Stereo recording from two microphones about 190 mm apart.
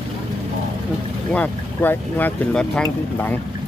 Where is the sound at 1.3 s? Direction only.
10° left (ahead or behind).